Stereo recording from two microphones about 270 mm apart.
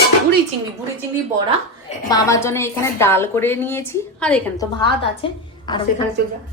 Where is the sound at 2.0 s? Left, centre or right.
Centre.